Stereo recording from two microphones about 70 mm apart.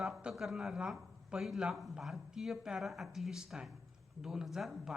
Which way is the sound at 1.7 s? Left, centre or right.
Centre.